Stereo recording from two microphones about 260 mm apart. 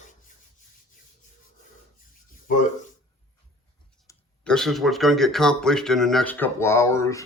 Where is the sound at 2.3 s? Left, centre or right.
Left.